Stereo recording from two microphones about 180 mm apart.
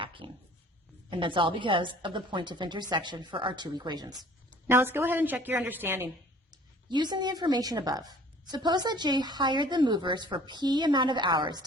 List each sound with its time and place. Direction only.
0.0 s a sound: 30° right (ahead or behind)
1.1 s a woman's voice: 25° right (ahead or behind); by 6.1 s 10° right (ahead or behind)
6.5 s a woman's voice: 25° right (ahead or behind)